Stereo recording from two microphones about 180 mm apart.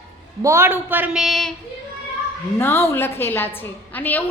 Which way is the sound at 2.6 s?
15° left (ahead or behind).